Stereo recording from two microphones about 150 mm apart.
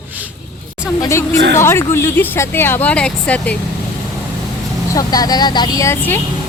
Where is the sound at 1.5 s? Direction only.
15° left (ahead or behind).